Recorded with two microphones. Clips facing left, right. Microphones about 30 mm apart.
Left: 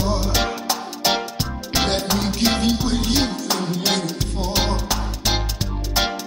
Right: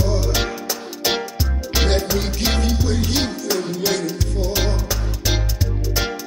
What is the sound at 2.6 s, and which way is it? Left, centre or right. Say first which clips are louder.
Music: left 2 dB; left.